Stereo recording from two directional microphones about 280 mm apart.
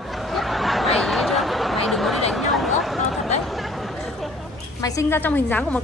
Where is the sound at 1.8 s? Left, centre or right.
Centre.